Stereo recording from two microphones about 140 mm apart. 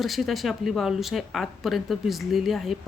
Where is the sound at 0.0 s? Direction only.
Centre (ahead or behind).